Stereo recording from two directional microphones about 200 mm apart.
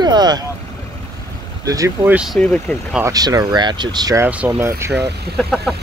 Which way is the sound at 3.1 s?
20° right (ahead or behind).